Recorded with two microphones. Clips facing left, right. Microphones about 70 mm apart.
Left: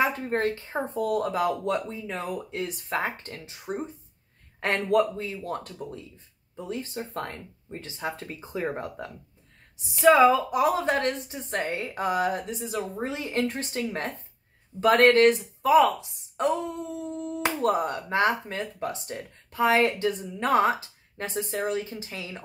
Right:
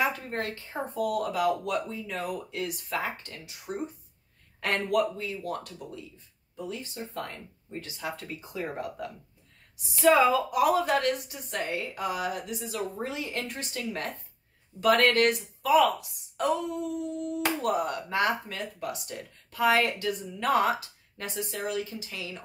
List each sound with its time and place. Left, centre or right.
0.0 s a woman's voice: left
7.8 s a woman's voice: left